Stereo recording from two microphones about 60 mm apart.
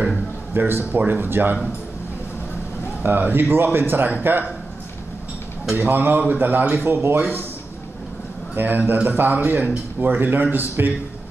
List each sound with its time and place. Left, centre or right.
0.6 s a man's voice: right
3.0 s a man's voice: right
5.8 s a man's voice: right
8.5 s a man's voice: right